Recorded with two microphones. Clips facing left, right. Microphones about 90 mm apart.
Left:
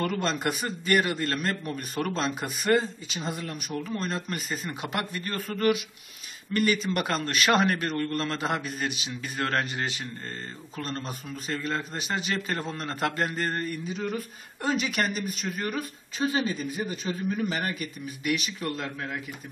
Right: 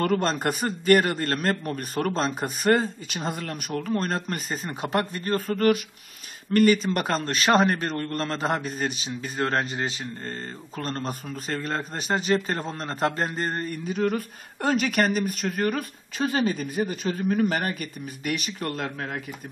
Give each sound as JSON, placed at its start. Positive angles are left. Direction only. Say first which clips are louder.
{"t": 0.0, "sound": "a man's voice", "louder": "right 4 dB", "side_deg": -45}
{"t": 10.8, "sound": "a man's voice", "louder": "right 4 dB", "side_deg": -40}
{"t": 13.8, "sound": "speech", "louder": "right 6 dB", "side_deg": -65}